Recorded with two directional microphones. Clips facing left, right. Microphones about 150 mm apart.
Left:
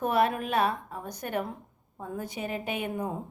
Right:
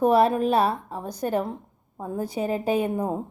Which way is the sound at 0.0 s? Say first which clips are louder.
Right 7 dB; 35° right (ahead or behind).